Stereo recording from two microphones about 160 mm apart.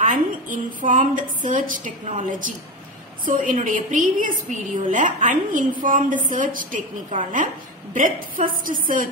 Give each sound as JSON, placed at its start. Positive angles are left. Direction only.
{"t": 0.0, "sound": "a woman's voice", "side_deg": -55}
{"t": 2.0, "sound": "a woman's voice", "side_deg": -45}
{"t": 3.3, "sound": "a woman's voice", "side_deg": -55}